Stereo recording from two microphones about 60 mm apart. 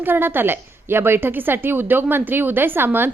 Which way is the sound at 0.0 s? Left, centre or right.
Right.